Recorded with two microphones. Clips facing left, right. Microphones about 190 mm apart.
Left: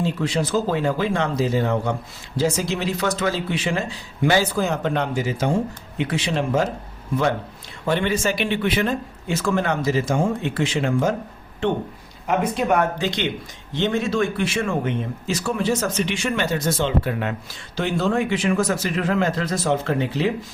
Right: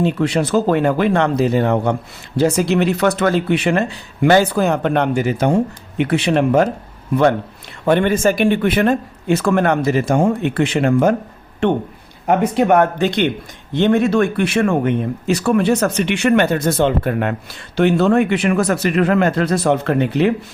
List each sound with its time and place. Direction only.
0.0 s speech: 65° right (ahead or behind)
7.9 s speech: 55° right (ahead or behind)
12.3 s speech: 65° right (ahead or behind)